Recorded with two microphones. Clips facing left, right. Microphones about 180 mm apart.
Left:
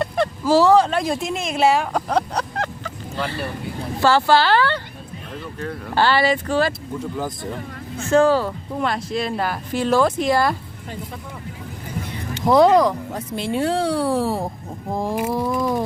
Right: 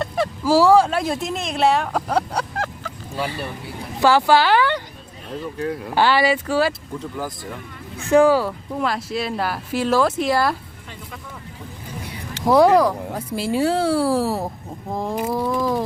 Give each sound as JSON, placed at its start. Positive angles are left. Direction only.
{"t": 0.0, "sound": "speech", "side_deg": -5}
{"t": 7.0, "sound": "speech", "side_deg": 20}
{"t": 8.1, "sound": "speech", "side_deg": -10}
{"t": 12.5, "sound": "speech", "side_deg": -10}